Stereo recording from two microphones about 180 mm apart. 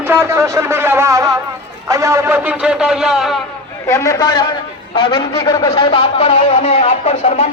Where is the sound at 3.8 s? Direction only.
20° left (ahead or behind).